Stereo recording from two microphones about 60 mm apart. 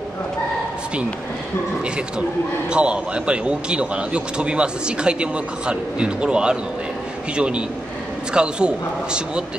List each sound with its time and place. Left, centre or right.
2.7 s a man's voice: centre